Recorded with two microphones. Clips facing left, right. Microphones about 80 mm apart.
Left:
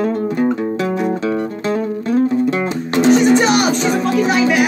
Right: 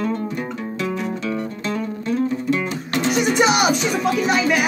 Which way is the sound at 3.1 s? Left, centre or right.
Centre.